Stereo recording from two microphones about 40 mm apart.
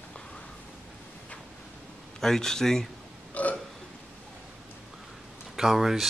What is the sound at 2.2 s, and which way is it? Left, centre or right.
Speech, centre.